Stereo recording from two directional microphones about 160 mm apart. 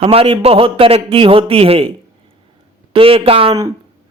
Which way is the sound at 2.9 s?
35° right (ahead or behind).